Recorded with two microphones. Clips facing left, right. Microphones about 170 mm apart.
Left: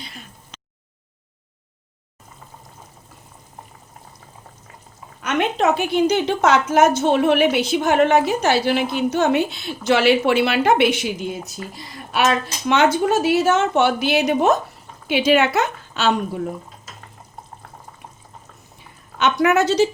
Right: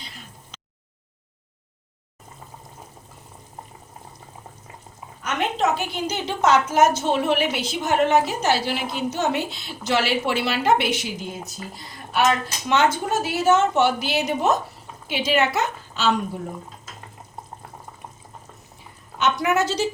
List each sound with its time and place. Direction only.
5.2 s a woman's voice: 60° left (ahead or behind)
12.1 s a woman's voice: 75° left (ahead or behind)
19.2 s a woman's voice: 65° left (ahead or behind)